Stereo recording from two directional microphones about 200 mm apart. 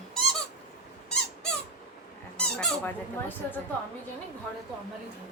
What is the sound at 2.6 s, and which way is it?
A woman's voice, 10° left (ahead or behind).